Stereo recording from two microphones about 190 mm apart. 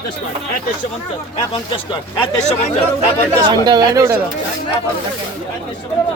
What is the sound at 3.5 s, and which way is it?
Speech, 20° right (ahead or behind).